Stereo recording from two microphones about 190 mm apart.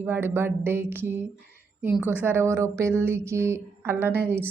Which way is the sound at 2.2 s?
10° right (ahead or behind).